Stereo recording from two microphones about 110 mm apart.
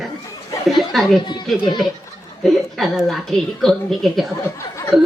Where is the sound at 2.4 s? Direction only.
Centre (ahead or behind).